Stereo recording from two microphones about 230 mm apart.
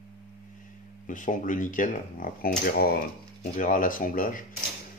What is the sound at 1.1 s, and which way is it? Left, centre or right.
Speech, left.